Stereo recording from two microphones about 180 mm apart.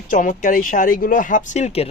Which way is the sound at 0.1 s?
45° left (ahead or behind).